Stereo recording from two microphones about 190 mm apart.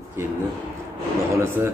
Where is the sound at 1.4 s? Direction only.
15° right (ahead or behind).